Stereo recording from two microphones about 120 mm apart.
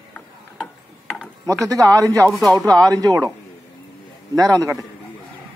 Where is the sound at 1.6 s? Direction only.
30° right (ahead or behind).